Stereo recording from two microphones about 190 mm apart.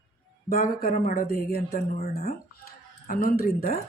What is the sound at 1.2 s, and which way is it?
Speech, 55° left (ahead or behind).